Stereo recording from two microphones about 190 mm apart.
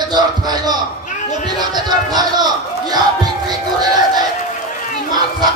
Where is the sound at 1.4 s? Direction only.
20° right (ahead or behind).